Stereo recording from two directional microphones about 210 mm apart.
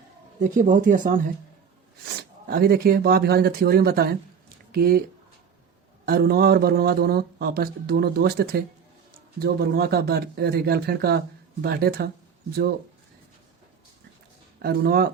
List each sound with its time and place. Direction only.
0.3 s speech: 40° right (ahead or behind)
2.5 s speech: 45° right (ahead or behind)
6.1 s speech: 45° right (ahead or behind)
14.6 s speech: 45° right (ahead or behind)